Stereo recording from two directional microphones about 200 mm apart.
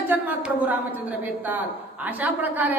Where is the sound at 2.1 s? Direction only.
10° right (ahead or behind).